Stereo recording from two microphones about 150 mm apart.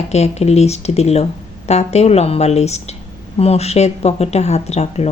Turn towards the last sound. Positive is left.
turn(degrees=45)  # may be behind; listen again after turning